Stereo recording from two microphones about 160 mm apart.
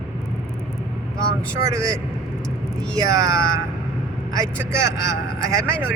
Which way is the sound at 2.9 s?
25° right (ahead or behind).